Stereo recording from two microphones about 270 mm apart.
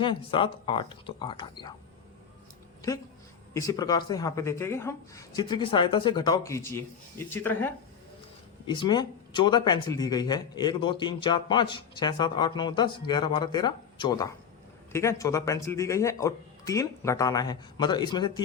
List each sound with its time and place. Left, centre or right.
0.0 s speech: centre
3.5 s speech: centre